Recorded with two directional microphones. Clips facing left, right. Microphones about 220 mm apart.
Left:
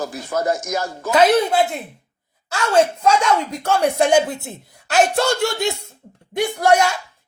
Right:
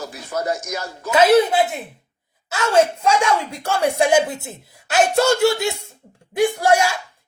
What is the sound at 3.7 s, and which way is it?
Speech, 5° right (ahead or behind).